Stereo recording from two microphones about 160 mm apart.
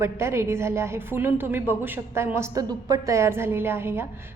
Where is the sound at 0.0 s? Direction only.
15° right (ahead or behind).